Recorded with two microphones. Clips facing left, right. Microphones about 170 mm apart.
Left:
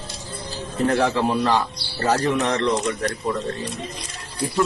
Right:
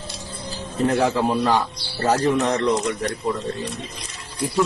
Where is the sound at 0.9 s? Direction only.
15° right (ahead or behind).